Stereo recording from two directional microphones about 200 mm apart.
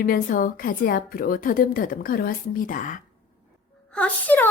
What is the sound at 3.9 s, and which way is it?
Speech, 5° left (ahead or behind).